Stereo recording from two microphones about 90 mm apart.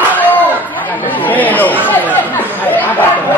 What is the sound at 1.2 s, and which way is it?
Chatter, 20° left (ahead or behind).